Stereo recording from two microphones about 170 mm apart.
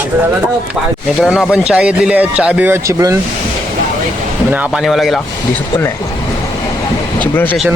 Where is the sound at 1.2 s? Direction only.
5° right (ahead or behind).